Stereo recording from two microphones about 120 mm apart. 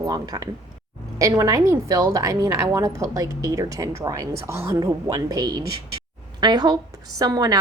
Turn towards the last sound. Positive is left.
turn(degrees=-35)  # may be behind; listen again after turning